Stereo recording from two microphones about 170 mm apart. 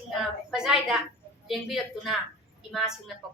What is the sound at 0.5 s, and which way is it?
A woman's voice, 5° right (ahead or behind).